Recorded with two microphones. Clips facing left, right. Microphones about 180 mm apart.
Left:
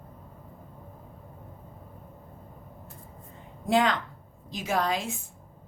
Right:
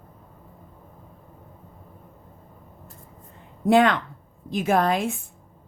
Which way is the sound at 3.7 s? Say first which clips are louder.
Right 6 dB; 60° right (ahead or behind).